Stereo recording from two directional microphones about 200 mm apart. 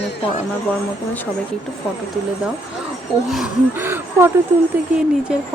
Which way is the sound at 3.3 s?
5° right (ahead or behind).